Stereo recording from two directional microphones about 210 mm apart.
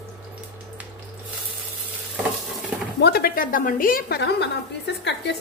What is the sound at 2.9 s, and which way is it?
A woman's voice, 50° left (ahead or behind).